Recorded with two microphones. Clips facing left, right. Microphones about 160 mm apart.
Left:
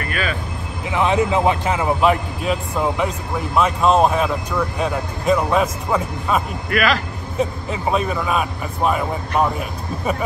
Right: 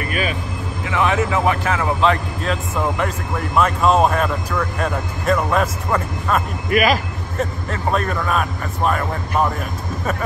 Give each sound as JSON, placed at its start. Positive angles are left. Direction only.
{"t": 0.0, "sound": "vehicle", "side_deg": 40}
{"t": 0.8, "sound": "a man's voice", "side_deg": 20}